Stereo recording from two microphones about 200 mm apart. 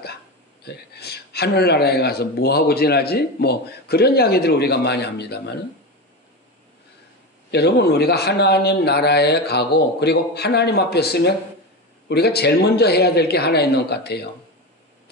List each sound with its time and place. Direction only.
0.7 s speech: 55° left (ahead or behind)
7.5 s a man's voice: 55° left (ahead or behind)